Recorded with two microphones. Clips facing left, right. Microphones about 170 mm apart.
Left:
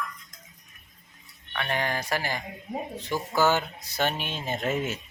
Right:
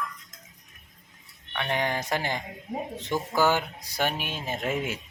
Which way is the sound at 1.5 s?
20° right (ahead or behind).